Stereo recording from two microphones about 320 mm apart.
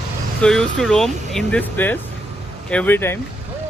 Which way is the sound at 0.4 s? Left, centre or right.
Centre.